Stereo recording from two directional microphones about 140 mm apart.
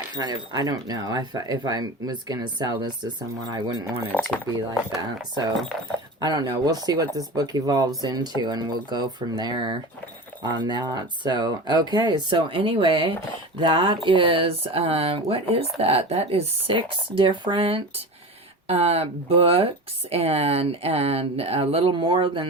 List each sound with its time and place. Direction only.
0.2 s speech: 30° right (ahead or behind)
4.1 s speech: 5° left (ahead or behind)
6.1 s speech: 30° right (ahead or behind)